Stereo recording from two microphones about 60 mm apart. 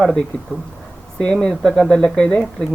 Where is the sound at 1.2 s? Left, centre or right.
Centre.